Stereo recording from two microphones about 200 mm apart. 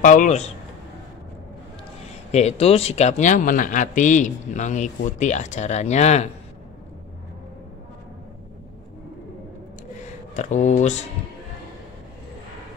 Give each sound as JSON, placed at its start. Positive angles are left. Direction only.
{"t": 0.0, "sound": "a man's voice", "side_deg": 40}
{"t": 2.3, "sound": "a man's voice", "side_deg": 30}
{"t": 10.3, "sound": "a man's voice", "side_deg": 35}